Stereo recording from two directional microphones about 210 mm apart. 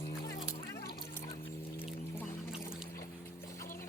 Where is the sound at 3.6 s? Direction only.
40° left (ahead or behind).